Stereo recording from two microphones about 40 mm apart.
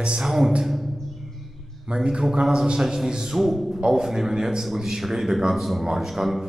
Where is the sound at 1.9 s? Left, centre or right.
Right.